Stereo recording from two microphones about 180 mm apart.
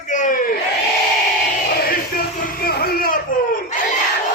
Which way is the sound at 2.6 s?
55° left (ahead or behind).